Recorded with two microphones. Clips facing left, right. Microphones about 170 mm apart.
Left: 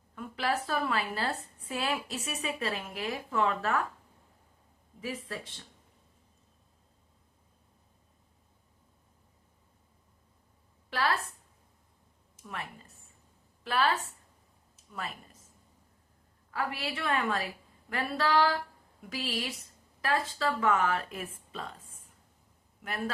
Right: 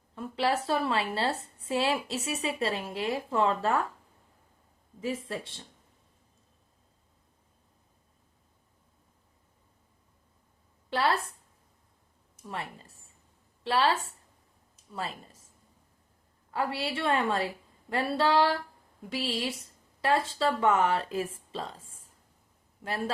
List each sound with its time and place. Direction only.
0.2 s a woman's voice: 30° right (ahead or behind)
5.3 s a woman's voice: 30° right (ahead or behind)
10.8 s a woman's voice: 30° right (ahead or behind)
12.5 s a woman's voice: 30° right (ahead or behind)
14.9 s a woman's voice: 30° right (ahead or behind)
16.5 s a woman's voice: 30° right (ahead or behind)
22.8 s a woman's voice: 30° right (ahead or behind)